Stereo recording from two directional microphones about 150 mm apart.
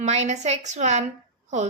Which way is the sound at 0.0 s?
50° right (ahead or behind).